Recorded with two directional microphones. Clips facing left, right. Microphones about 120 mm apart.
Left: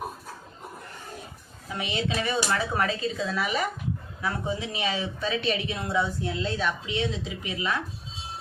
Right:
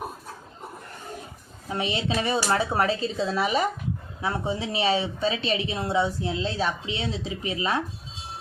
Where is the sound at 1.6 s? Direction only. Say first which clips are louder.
Right 3 dB; 30° right (ahead or behind).